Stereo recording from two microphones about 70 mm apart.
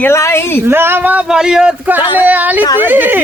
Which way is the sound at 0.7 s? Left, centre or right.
Right.